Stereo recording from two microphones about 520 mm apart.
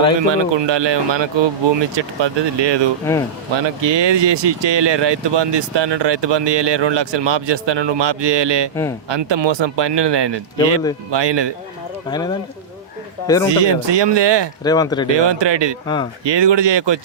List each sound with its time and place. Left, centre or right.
0.2 s speech: right
13.2 s speech: centre
13.5 s speech: right
14.6 s speech: centre
15.1 s speech: right